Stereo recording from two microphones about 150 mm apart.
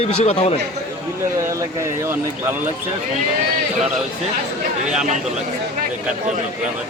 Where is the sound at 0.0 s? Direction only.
45° left (ahead or behind).